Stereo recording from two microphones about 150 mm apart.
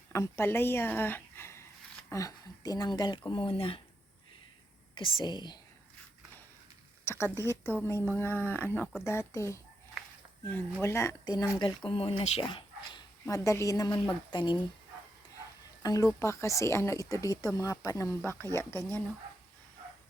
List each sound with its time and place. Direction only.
0.1 s a woman's voice: 20° left (ahead or behind); by 3.8 s 35° left (ahead or behind)
4.9 s speech: 30° left (ahead or behind)
7.0 s a sound: 15° left (ahead or behind)
7.3 s a woman's voice: 20° right (ahead or behind)
7.9 s speech: 15° left (ahead or behind); by 13.1 s 35° left (ahead or behind)
13.2 s speech: 20° left (ahead or behind)
15.8 s speech: 25° left (ahead or behind)